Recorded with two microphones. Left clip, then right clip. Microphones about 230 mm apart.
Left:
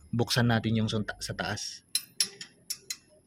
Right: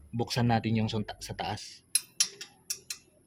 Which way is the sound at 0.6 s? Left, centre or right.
Left.